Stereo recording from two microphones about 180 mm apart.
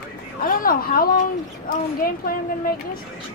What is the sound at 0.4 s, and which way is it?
A woman's voice, 50° left (ahead or behind).